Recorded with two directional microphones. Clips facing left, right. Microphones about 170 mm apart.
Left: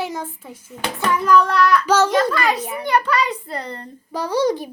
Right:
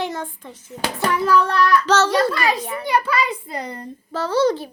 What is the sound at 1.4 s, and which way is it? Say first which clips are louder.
Child singing: left 1 dB; 30° right (ahead or behind).